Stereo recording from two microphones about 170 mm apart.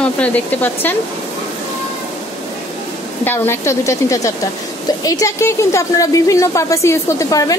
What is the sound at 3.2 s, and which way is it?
Speech, 15° left (ahead or behind).